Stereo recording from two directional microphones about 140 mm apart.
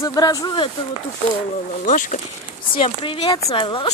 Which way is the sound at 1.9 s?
65° left (ahead or behind).